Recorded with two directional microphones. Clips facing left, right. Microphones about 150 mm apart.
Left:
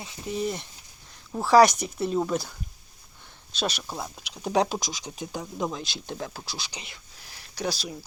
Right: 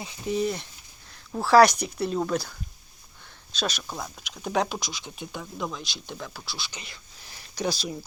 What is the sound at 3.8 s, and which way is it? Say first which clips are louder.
Speech: left 1 dB; 10° left (ahead or behind).